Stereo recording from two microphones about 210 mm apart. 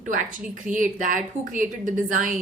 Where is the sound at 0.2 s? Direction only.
40° right (ahead or behind).